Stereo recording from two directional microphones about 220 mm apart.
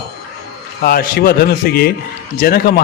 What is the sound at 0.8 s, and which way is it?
A man's voice, 40° left (ahead or behind).